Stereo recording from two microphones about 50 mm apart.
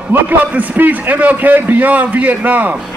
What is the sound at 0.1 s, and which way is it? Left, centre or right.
A man's voice, right.